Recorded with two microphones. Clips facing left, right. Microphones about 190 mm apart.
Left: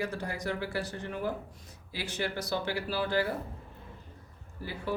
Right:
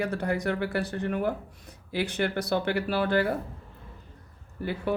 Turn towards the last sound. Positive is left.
turn(degrees=-60)  # may be behind; listen again after turning